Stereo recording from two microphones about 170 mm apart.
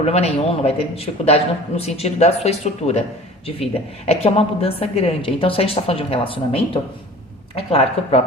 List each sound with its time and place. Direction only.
0.0 s a woman's voice: 40° left (ahead or behind)